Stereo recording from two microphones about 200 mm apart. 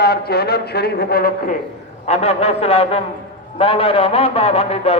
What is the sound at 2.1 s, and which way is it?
A man's voice, 30° left (ahead or behind).